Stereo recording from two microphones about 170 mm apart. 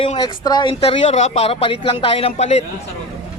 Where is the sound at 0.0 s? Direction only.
30° left (ahead or behind).